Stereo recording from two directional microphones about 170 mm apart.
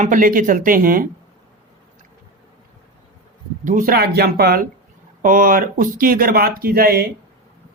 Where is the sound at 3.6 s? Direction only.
50° right (ahead or behind); by 7.1 s 65° right (ahead or behind).